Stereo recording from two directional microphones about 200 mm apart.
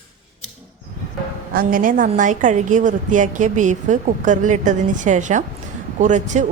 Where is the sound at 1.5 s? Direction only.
45° right (ahead or behind).